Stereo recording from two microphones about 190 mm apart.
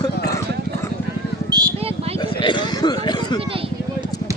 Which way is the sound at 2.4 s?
25° left (ahead or behind).